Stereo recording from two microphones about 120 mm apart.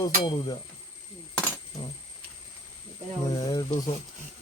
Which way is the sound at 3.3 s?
35° left (ahead or behind).